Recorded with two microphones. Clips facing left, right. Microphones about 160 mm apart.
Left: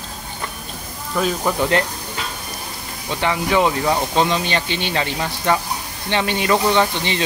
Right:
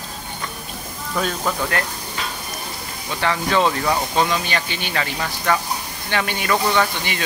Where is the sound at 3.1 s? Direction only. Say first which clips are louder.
Left 2 dB; 15° left (ahead or behind).